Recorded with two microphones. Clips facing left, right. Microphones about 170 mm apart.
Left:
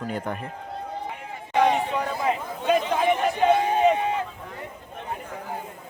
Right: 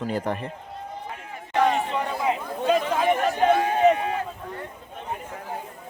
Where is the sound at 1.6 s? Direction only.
Centre (ahead or behind).